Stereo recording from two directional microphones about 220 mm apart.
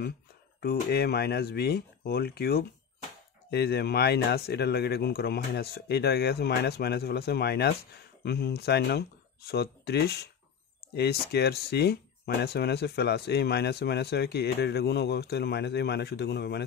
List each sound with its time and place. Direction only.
0.6 s speech: 45° left (ahead or behind)